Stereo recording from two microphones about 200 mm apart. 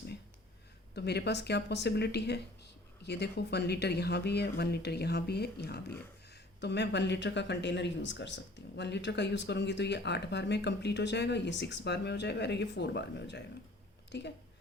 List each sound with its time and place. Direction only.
0.9 s speech: 55° left (ahead or behind)